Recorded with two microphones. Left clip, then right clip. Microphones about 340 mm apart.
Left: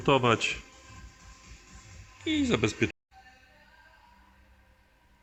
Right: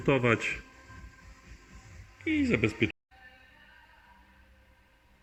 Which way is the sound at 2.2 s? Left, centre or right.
Left.